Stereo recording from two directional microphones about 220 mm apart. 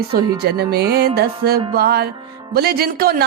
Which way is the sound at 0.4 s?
45° right (ahead or behind).